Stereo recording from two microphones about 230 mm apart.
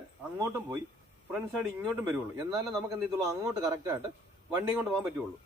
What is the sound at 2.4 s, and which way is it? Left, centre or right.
Speech, centre.